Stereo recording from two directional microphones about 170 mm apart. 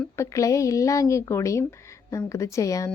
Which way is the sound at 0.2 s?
20° left (ahead or behind).